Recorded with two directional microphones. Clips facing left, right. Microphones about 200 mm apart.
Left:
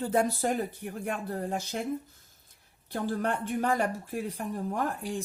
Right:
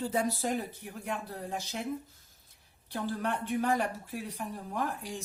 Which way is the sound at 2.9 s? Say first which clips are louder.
Left 3 dB; 50° left (ahead or behind).